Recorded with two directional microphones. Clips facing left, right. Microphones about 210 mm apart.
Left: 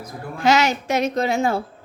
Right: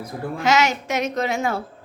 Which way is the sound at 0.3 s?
30° left (ahead or behind).